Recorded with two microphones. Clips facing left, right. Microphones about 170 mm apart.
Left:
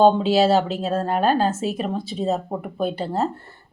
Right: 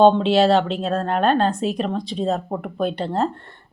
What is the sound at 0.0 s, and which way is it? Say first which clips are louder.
A woman's voice: right 2 dB; 5° left (ahead or behind).